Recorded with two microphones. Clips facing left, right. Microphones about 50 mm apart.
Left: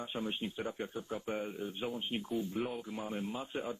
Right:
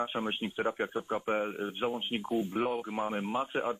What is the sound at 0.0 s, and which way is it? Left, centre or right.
Speech, right.